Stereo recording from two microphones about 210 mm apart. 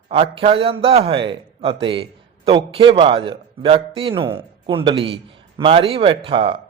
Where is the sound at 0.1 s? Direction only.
25° right (ahead or behind).